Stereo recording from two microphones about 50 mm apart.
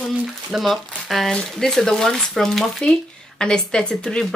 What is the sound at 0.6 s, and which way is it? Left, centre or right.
Speech, centre.